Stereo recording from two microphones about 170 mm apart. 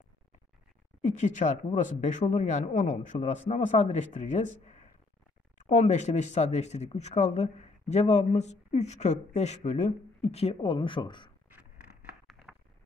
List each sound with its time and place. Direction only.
1.0 s speech: 45° left (ahead or behind)
5.7 s speech: 45° left (ahead or behind); by 11.3 s 25° left (ahead or behind)
12.3 s a sound: 5° left (ahead or behind)